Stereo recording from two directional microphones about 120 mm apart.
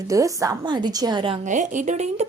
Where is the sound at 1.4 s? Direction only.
90° right.